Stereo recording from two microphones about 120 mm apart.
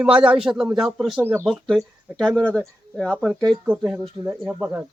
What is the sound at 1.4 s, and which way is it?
Speech, 5° left (ahead or behind).